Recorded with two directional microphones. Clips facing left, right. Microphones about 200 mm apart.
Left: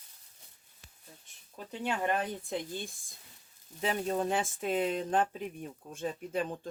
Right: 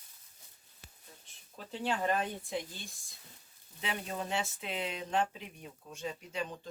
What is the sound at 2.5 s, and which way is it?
Speech, 50° left (ahead or behind).